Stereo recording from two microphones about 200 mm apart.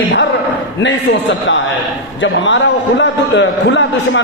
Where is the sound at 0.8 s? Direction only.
65° left (ahead or behind).